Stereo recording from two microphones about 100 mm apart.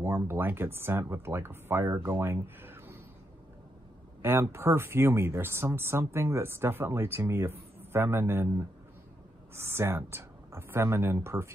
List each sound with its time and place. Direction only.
0.0 s speech: 25° right (ahead or behind)
4.2 s speech: 25° right (ahead or behind)